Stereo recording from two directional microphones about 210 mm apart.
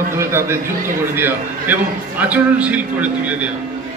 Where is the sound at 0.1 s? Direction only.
10° right (ahead or behind).